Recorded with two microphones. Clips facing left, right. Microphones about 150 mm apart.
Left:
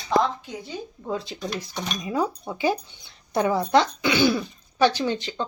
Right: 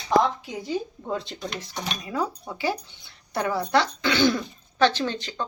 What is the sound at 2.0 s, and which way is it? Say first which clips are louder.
Speech: left 4 dB; 20° left (ahead or behind).